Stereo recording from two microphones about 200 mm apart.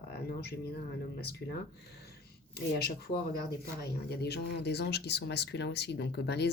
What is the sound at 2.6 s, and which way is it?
Speech, 50° left (ahead or behind).